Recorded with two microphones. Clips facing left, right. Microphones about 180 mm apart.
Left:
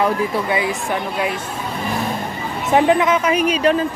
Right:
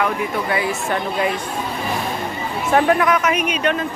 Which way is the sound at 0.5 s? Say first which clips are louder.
Left 1 dB; 15° left (ahead or behind).